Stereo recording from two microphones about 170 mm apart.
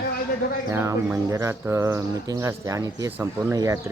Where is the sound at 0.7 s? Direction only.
20° right (ahead or behind).